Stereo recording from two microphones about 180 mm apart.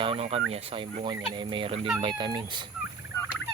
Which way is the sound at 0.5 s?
30° right (ahead or behind).